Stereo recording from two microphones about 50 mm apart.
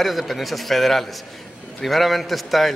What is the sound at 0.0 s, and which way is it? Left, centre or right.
A man's voice, centre.